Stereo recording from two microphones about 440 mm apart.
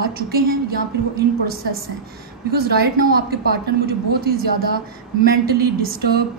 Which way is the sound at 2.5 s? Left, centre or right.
Right.